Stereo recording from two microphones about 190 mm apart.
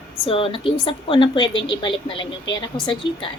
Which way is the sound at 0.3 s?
30° left (ahead or behind).